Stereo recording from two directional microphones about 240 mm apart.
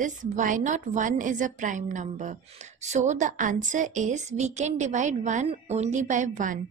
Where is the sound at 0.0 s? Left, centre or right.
Right.